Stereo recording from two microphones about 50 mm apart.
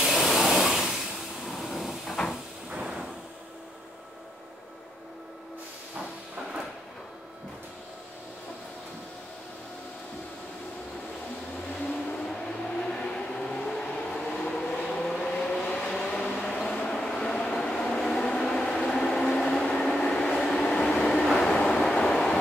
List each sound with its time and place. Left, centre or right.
0.0 s vacuum cleaner: centre
1.4 s vehicle: centre
2.7 s a sound: centre
11.8 s vehicle: left
16.1 s a sound: left
16.5 s vehicle: centre
19.4 s train: centre
21.4 s vehicle: centre